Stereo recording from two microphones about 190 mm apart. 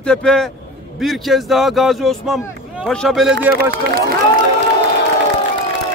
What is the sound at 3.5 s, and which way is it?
Speech, 50° right (ahead or behind).